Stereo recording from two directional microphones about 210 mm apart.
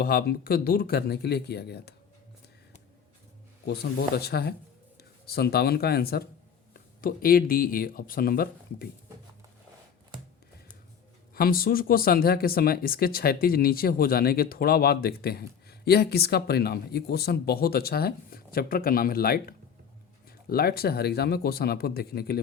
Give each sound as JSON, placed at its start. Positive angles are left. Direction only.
{"t": 0.0, "sound": "speech", "side_deg": 45}
{"t": 3.7, "sound": "speech", "side_deg": 50}
{"t": 11.3, "sound": "speech", "side_deg": 45}